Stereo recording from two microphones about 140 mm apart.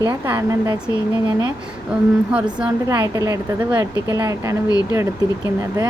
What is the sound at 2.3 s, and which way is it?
Speech, 5° right (ahead or behind).